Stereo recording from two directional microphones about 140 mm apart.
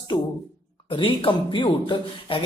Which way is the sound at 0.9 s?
40° left (ahead or behind).